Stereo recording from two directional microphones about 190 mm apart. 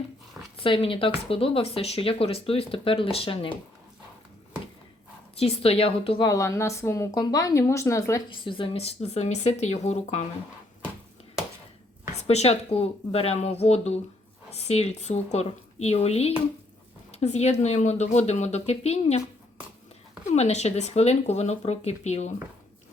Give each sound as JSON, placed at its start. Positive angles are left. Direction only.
{"t": 0.5, "sound": "speech", "side_deg": 30}
{"t": 5.4, "sound": "a woman's voice", "side_deg": 30}
{"t": 8.3, "sound": "speech", "side_deg": 25}
{"t": 12.1, "sound": "speech", "side_deg": 35}
{"t": 20.2, "sound": "speech", "side_deg": 35}